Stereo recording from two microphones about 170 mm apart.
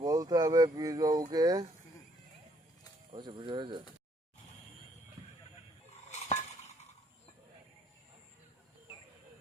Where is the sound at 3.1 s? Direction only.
25° right (ahead or behind).